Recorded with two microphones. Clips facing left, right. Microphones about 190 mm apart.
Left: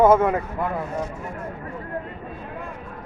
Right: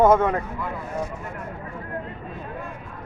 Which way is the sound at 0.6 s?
55° left (ahead or behind).